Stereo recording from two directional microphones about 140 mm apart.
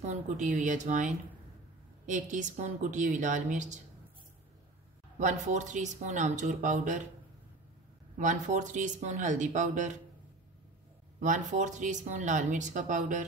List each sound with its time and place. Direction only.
0.0 s speech: 55° right (ahead or behind)
5.2 s speech: 60° right (ahead or behind)
8.2 s speech: 65° right (ahead or behind)
11.1 s speech: 65° right (ahead or behind)